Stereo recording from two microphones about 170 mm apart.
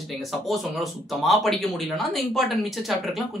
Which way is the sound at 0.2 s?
Centre (ahead or behind).